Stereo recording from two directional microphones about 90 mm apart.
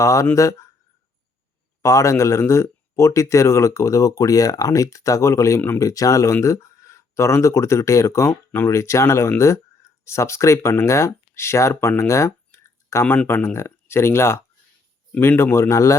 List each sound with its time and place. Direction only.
0.0 s speech: 35° left (ahead or behind)
1.8 s speech: 35° left (ahead or behind)